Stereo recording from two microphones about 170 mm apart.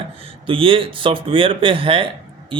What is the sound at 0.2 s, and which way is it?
Speech, 30° right (ahead or behind).